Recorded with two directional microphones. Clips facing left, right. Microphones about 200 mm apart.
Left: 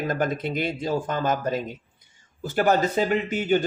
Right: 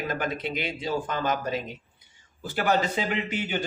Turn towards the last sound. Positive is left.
turn(degrees=45)  # may be behind; listen again after turning